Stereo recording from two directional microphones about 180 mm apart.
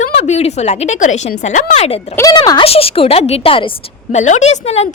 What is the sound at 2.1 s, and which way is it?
Speech, 20° left (ahead or behind).